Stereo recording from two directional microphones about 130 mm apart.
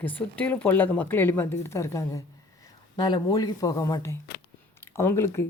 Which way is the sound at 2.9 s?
35° left (ahead or behind).